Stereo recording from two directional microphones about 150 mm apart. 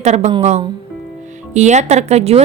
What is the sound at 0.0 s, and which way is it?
Speech, 50° right (ahead or behind).